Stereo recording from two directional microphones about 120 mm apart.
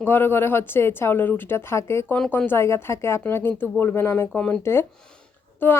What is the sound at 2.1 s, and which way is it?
Speech, 10° left (ahead or behind).